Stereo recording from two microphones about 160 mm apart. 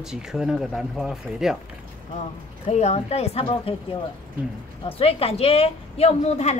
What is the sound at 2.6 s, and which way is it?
A woman's voice, 45° left (ahead or behind).